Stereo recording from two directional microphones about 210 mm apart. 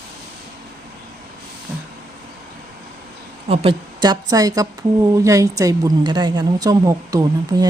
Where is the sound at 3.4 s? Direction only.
25° right (ahead or behind).